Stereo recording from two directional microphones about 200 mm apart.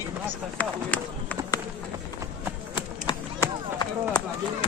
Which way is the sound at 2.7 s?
25° left (ahead or behind).